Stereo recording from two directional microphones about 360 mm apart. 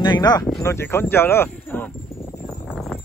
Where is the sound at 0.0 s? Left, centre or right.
Centre.